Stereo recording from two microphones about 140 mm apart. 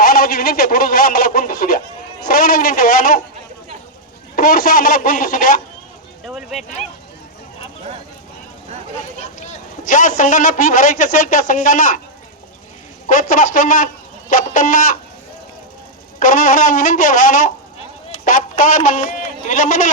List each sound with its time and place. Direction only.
0.0 s speech: 90° left
2.2 s a sound: 90° left
4.4 s a sound: 90° left
6.2 s speech: centre (ahead or behind)
9.4 s a man's voice: 65° left (ahead or behind)
13.1 s speech: 75° left (ahead or behind)
16.2 s a man's voice: 75° left (ahead or behind)